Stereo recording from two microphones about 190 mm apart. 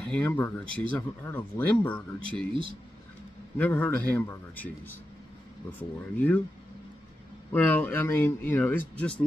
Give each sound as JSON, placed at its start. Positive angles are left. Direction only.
{"t": 0.0, "sound": "speech", "side_deg": 5}
{"t": 3.5, "sound": "speech", "side_deg": 10}
{"t": 7.5, "sound": "speech", "side_deg": 10}